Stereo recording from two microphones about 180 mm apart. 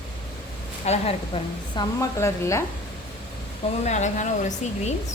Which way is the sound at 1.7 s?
15° left (ahead or behind).